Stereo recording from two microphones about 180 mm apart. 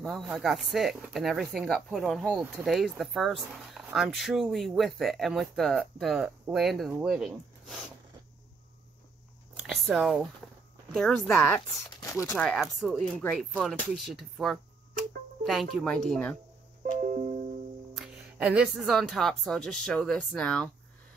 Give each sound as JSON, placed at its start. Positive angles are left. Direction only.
{"t": 0.0, "sound": "speech", "side_deg": 0}
{"t": 9.6, "sound": "speech", "side_deg": 0}
{"t": 17.0, "sound": "music", "side_deg": -45}
{"t": 17.9, "sound": "speech", "side_deg": -5}